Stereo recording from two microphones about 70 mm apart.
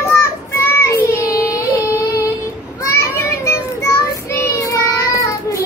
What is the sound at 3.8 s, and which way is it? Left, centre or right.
Child singing, left.